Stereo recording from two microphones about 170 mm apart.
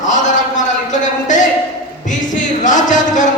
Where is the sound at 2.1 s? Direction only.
50° left (ahead or behind).